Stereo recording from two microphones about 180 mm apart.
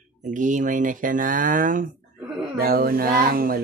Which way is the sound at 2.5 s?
55° right (ahead or behind).